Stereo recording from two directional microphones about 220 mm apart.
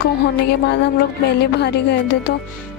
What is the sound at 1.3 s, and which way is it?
Music, 50° left (ahead or behind).